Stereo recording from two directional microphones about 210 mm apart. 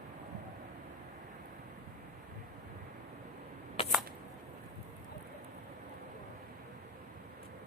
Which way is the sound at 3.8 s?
30° left (ahead or behind).